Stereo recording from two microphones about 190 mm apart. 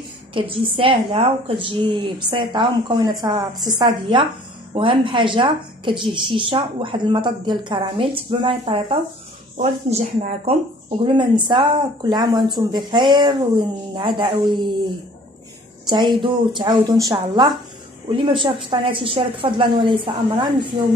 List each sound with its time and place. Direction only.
0.3 s a woman's voice: 30° right (ahead or behind)
15.9 s a woman's voice: 25° right (ahead or behind)